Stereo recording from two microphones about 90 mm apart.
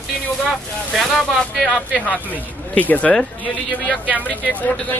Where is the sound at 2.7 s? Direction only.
15° left (ahead or behind).